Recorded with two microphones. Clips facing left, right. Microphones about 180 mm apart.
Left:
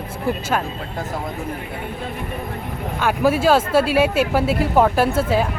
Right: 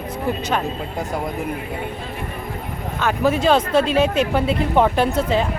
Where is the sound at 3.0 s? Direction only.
10° left (ahead or behind).